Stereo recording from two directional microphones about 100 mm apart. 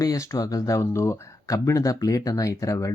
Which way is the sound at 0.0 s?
35° left (ahead or behind).